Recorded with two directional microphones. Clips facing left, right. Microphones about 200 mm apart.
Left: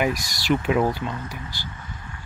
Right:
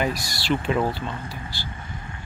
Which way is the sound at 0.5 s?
10° left (ahead or behind).